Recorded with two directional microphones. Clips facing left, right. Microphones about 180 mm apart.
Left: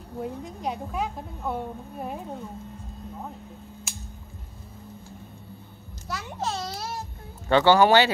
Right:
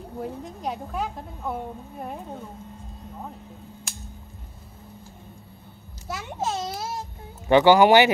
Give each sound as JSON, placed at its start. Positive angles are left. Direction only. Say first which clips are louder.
{"t": 0.2, "sound": "a woman's voice", "louder": "left 1 dB", "side_deg": 0}
{"t": 6.0, "sound": "a child's voice", "louder": "right 2 dB", "side_deg": -20}